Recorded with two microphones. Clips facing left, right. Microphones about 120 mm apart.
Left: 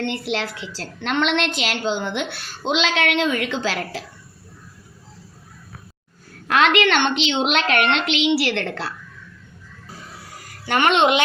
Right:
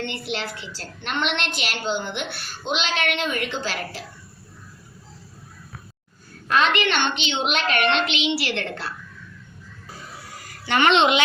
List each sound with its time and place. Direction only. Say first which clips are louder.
0.3 s a woman's voice: left 4 dB; 90° left
6.5 s a woman's voice: left 4 dB; 80° left
10.7 s speech: left 1 dB; 45° left (ahead or behind)